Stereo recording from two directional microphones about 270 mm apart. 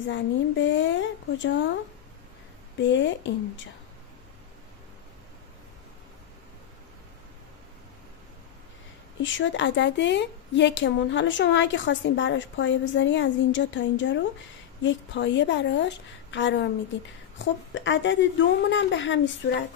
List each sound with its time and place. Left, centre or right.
0.1 s a woman's voice: left
2.8 s a woman's voice: left
9.2 s a woman's voice: left